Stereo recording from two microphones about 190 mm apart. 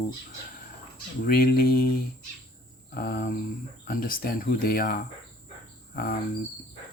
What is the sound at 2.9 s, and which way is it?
Speech, 50° left (ahead or behind).